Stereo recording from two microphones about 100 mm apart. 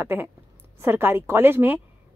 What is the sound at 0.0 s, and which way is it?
A woman's voice, 20° right (ahead or behind).